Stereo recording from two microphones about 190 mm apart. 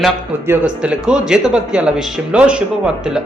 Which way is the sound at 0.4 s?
10° right (ahead or behind).